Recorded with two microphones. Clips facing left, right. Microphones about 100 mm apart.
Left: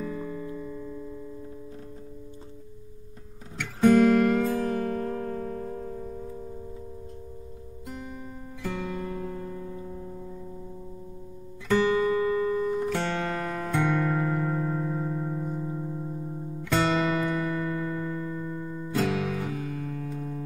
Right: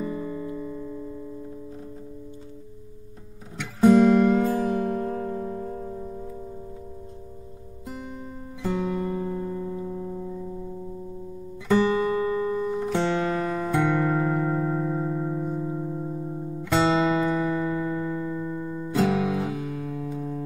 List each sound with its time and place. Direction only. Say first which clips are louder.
0.0 s music: right 3 dB; 10° right (ahead or behind)
3.8 s guitar: right 2 dB; centre (ahead or behind)
4.4 s music: right 3 dB; 15° right (ahead or behind)
8.6 s music: right 6 dB; 15° right (ahead or behind)
11.7 s music: right 1 dB; 20° right (ahead or behind)
13.2 s music: right 5 dB; 10° right (ahead or behind)